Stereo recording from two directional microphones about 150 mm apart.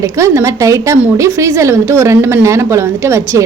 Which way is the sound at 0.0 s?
20° right (ahead or behind).